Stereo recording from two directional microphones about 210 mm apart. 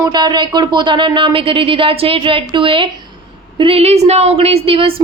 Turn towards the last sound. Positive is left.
turn(degrees=-25)  # may be behind; listen again after turning